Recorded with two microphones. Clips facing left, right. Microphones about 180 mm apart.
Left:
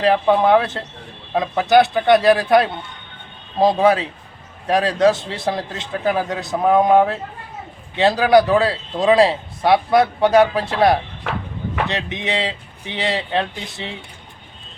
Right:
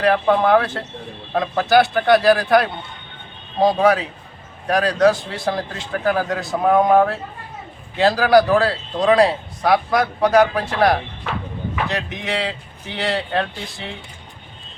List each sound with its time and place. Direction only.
0.0 s a man's voice: 20° left (ahead or behind)
6.6 s speech: 5° left (ahead or behind)
6.9 s a man's voice: 20° left (ahead or behind)